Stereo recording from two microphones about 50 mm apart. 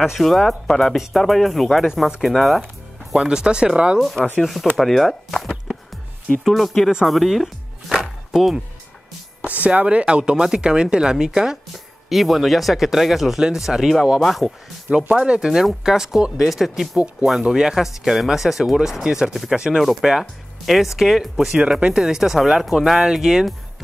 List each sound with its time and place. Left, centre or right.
0.0 s speech: centre
3.2 s speech: centre
4.0 s speech: centre
7.1 s music: centre
9.4 s a sound: right
9.8 s speech: right
12.1 s speech: centre
14.9 s speech: right
15.8 s speech: centre
19.8 s speech: centre